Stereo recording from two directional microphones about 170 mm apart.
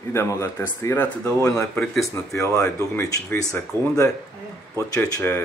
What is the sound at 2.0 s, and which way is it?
Speech, 20° left (ahead or behind).